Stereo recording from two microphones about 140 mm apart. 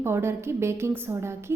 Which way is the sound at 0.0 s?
15° right (ahead or behind).